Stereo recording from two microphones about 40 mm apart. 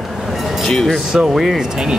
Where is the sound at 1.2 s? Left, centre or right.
Centre.